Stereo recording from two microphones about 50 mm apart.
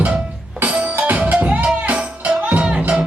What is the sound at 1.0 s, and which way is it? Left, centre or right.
Music, right.